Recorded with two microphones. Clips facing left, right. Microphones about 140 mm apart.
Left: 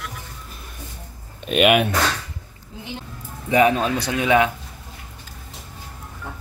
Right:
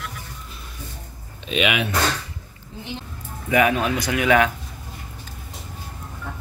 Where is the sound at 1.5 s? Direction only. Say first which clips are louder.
Left 6 dB; 50° left (ahead or behind).